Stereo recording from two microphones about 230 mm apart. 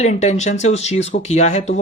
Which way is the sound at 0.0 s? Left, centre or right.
Left.